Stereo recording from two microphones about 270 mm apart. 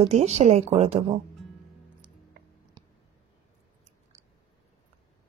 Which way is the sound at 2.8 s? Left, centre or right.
Centre.